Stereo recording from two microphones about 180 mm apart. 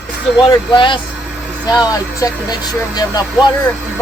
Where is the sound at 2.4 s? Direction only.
20° left (ahead or behind).